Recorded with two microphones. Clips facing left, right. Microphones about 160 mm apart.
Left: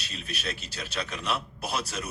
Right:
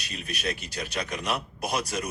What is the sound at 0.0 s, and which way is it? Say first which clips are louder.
A man's voice: right 3 dB; 15° right (ahead or behind).